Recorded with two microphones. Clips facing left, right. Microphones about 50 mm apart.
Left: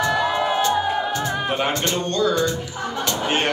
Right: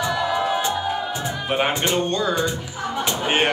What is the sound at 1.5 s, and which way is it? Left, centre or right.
Speech, centre.